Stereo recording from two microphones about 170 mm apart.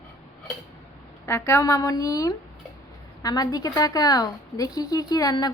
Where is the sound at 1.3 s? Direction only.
15° left (ahead or behind).